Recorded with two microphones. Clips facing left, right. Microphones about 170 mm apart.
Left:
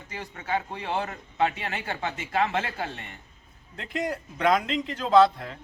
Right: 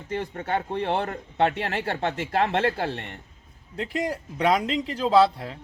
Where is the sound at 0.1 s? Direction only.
55° right (ahead or behind).